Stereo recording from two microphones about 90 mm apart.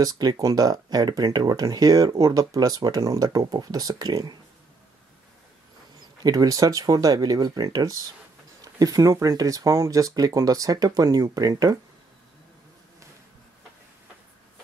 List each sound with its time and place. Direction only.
0.0 s speech: 45° right (ahead or behind)
6.2 s speech: 45° right (ahead or behind)